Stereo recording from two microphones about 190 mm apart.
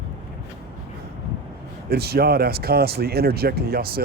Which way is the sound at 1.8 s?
55° right (ahead or behind).